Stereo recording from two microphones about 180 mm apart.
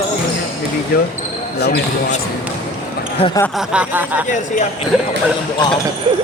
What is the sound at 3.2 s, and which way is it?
Speech, 30° left (ahead or behind).